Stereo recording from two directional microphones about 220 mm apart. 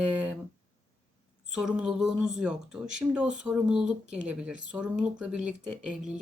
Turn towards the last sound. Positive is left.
turn(degrees=-5)  # may be behind; listen again after turning